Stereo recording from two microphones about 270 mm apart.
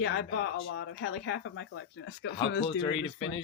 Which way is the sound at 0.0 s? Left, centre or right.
Left.